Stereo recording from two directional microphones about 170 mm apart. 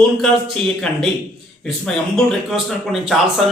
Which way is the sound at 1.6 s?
Centre (ahead or behind).